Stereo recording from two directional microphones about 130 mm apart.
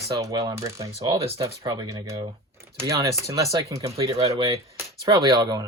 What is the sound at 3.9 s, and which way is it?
Speech, 50° right (ahead or behind).